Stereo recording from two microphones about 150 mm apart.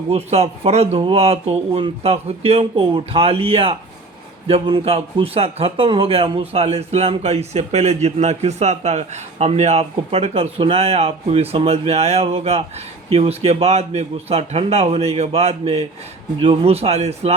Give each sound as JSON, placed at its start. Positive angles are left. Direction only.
{"t": 0.1, "sound": "a man's voice", "side_deg": -45}